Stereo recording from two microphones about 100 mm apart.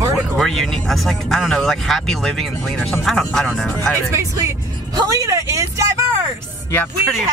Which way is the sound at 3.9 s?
30° right (ahead or behind).